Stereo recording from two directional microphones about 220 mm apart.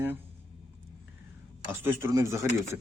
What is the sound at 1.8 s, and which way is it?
Speech, 10° right (ahead or behind).